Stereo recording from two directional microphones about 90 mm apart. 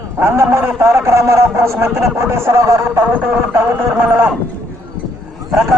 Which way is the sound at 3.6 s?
25° right (ahead or behind).